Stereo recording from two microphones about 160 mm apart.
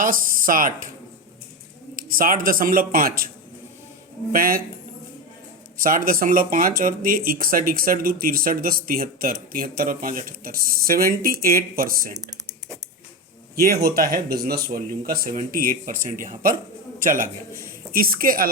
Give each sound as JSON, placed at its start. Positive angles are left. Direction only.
{"t": 0.0, "sound": "speech", "side_deg": -60}
{"t": 2.0, "sound": "speech", "side_deg": -60}
{"t": 4.3, "sound": "speech", "side_deg": -65}
{"t": 5.7, "sound": "speech", "side_deg": -60}
{"t": 13.6, "sound": "a man's voice", "side_deg": -70}